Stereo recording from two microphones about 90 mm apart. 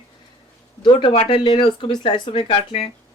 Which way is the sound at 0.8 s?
60° left (ahead or behind).